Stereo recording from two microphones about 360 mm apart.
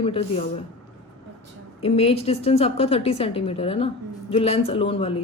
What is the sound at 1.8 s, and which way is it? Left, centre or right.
A woman's voice, centre.